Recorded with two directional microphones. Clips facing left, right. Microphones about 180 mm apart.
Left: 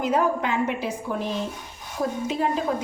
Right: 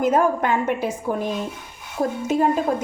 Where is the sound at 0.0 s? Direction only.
50° right (ahead or behind).